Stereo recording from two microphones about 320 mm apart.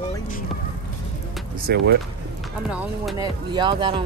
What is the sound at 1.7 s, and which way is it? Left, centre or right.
Speech, right.